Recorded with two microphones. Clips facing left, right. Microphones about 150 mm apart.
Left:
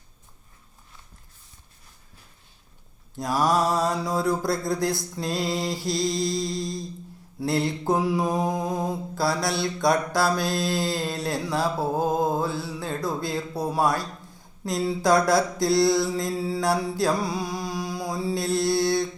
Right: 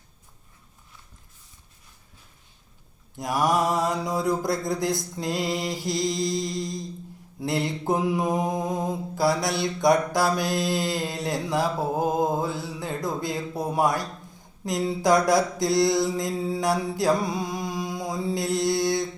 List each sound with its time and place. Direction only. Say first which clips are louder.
3.2 s mantra: left 1 dB; 20° right (ahead or behind)